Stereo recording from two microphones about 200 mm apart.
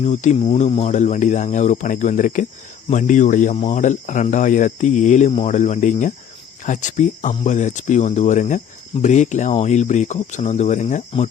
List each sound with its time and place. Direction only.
0.0 s speech: 35° left (ahead or behind)